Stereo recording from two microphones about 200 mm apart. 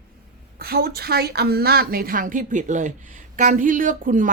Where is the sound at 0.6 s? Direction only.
50° right (ahead or behind).